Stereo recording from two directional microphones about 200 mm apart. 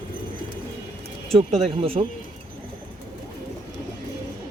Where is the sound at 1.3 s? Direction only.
30° right (ahead or behind).